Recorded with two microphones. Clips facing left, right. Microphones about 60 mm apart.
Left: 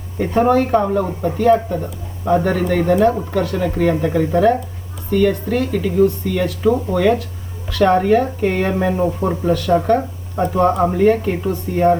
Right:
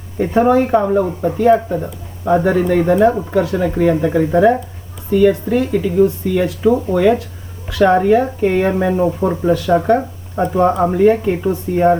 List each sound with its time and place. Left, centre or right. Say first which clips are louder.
0.4 s speech: right 1 dB; centre